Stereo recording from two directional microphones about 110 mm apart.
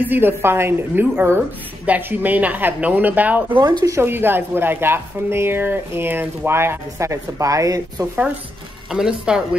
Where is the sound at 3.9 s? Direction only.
20° right (ahead or behind).